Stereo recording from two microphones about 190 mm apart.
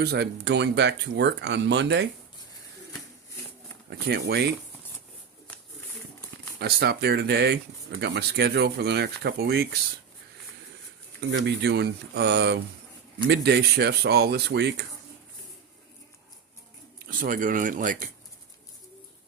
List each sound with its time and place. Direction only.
0.0 s speech: 60° right (ahead or behind)
3.8 s speech: 55° right (ahead or behind)
6.6 s speech: 55° right (ahead or behind)
11.2 s speech: 70° right (ahead or behind)
17.1 s speech: 45° right (ahead or behind)